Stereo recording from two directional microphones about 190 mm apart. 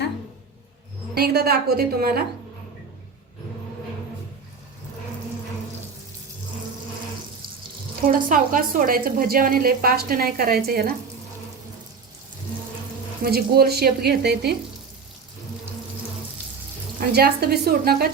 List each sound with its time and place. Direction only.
1.1 s frying: 55° right (ahead or behind)
8.3 s a woman's voice: 45° right (ahead or behind)
13.2 s frying: 55° right (ahead or behind)
17.1 s frying: 55° right (ahead or behind)